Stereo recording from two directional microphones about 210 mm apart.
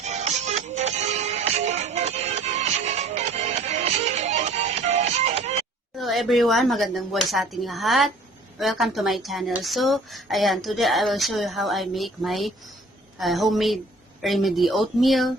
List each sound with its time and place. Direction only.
0.0 s music: 35° right (ahead or behind)
6.0 s speech: centre (ahead or behind)